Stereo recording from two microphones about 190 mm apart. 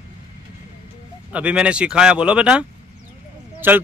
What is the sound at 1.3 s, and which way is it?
Speech, 5° right (ahead or behind).